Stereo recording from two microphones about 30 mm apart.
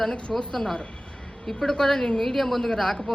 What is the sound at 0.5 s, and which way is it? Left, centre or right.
A woman's voice, centre.